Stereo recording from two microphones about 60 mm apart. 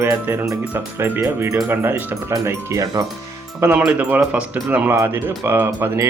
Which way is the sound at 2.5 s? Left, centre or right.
Right.